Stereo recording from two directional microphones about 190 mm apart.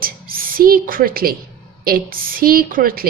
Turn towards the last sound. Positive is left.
turn(degrees=-50)  # may be behind; listen again after turning